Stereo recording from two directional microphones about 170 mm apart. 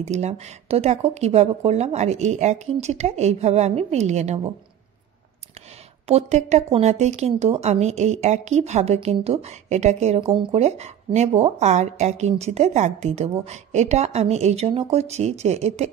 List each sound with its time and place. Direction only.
0.0 s a woman's voice: 40° right (ahead or behind)
6.0 s a woman's voice: 40° right (ahead or behind)